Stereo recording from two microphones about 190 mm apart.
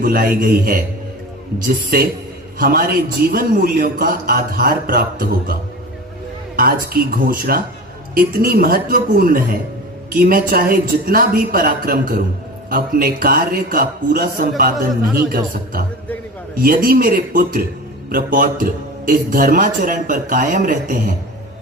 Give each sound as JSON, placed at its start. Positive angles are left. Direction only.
{"t": 0.0, "sound": "a man's voice", "side_deg": -50}
{"t": 1.9, "sound": "a man's voice", "side_deg": -50}
{"t": 6.6, "sound": "a man's voice", "side_deg": -50}